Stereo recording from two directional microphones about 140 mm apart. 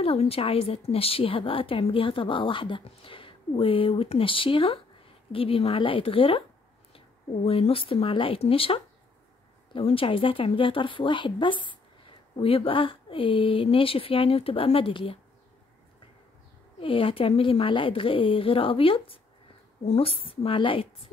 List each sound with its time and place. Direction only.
0.0 s a woman's voice: 45° left (ahead or behind)
7.4 s a woman's voice: 45° left (ahead or behind)
16.8 s a woman's voice: 40° left (ahead or behind)